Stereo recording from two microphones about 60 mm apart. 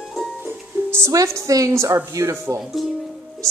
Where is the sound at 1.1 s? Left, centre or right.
Right.